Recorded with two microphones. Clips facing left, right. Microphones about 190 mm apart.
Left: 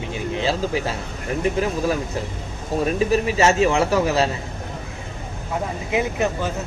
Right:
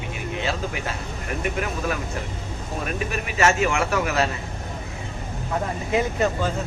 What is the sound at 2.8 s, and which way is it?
Speech, 30° left (ahead or behind).